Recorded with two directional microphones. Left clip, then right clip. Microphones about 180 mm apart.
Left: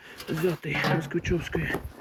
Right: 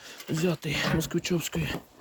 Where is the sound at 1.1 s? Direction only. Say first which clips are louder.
Left 1 dB; 35° right (ahead or behind).